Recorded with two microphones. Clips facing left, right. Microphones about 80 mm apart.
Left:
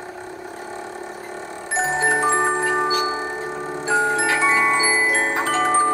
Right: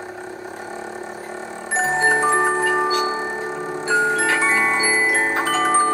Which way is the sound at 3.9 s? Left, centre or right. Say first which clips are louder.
Right 1 dB; centre.